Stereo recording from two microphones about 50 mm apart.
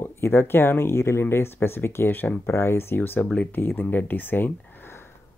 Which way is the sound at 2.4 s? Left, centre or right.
Left.